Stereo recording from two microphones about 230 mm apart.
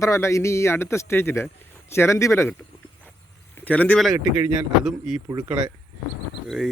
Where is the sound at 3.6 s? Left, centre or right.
Centre.